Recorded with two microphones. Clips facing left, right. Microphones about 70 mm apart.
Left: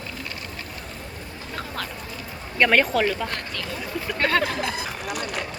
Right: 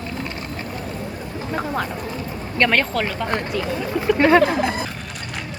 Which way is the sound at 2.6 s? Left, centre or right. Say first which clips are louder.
Even; centre.